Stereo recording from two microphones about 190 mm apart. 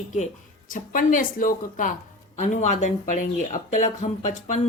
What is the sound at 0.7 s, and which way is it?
Speech, 45° left (ahead or behind).